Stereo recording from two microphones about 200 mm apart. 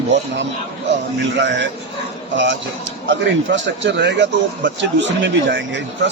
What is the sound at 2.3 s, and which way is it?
A man's voice, 65° right (ahead or behind).